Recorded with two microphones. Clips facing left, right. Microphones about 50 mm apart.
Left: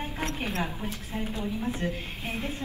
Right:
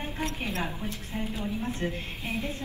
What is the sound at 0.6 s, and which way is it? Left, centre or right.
Speech, centre.